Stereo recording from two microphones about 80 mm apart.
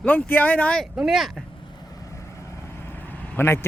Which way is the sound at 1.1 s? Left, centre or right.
Centre.